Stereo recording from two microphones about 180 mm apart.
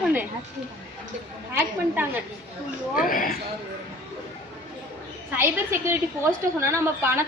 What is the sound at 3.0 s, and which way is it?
Speech, 50° left (ahead or behind).